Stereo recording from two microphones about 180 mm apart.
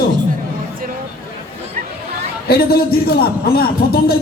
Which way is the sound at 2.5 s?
60° left (ahead or behind).